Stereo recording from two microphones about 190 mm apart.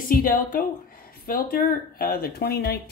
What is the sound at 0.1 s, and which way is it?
A woman's voice, 50° left (ahead or behind).